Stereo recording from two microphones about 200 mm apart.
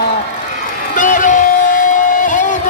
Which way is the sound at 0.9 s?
40° left (ahead or behind).